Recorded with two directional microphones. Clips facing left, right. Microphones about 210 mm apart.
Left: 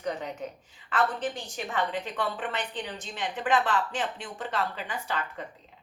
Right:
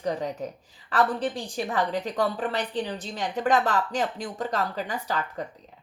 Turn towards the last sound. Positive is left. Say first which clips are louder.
# right 4 dB
turn(degrees=-40)  # may be behind; listen again after turning